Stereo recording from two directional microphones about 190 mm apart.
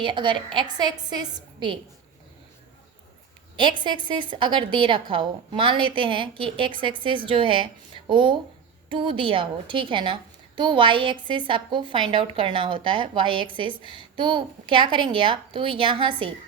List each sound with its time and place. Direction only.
0.0 s a woman's voice: 25° right (ahead or behind)
3.6 s a woman's voice: 25° right (ahead or behind)